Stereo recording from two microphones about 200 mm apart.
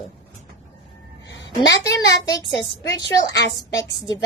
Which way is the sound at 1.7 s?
15° left (ahead or behind).